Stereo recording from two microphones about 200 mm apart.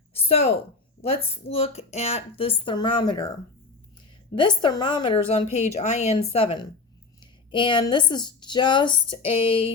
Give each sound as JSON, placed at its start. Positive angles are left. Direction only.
{"t": 0.1, "sound": "a woman's voice", "side_deg": 30}
{"t": 4.4, "sound": "a woman's voice", "side_deg": 25}